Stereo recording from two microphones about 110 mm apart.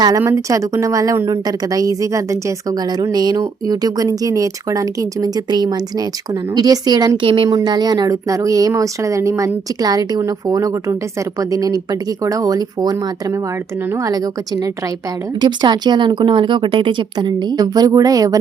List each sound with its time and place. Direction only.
0.2 s a woman's voice: 30° right (ahead or behind)
7.3 s speech: 55° right (ahead or behind)
7.5 s a woman's voice: 40° right (ahead or behind)
14.0 s a woman's voice: 35° right (ahead or behind)